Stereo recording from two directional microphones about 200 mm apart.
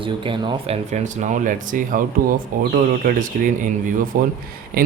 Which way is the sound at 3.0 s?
45° right (ahead or behind).